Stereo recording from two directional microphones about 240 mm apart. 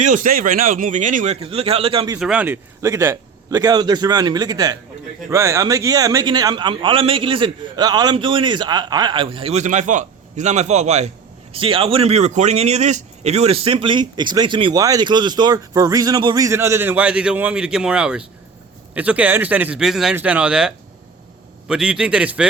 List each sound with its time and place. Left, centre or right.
0.0 s a man's voice: right
2.1 s a man's voice: centre